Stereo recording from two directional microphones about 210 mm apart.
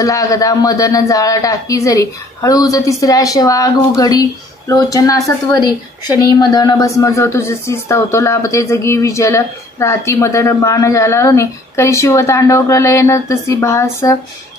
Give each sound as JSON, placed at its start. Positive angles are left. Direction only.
{"t": 0.0, "sound": "a man's voice", "side_deg": 15}